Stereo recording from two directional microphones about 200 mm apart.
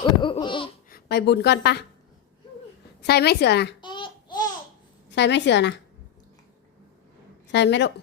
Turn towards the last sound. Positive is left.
turn(degrees=60)  # may be behind; listen again after turning